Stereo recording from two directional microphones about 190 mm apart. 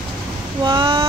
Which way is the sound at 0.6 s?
25° right (ahead or behind).